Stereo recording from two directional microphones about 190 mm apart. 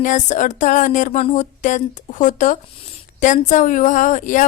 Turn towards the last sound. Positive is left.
turn(degrees=40)  # may be behind; listen again after turning